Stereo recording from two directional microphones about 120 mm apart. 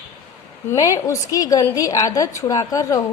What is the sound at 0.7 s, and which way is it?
A woman's voice, 30° left (ahead or behind).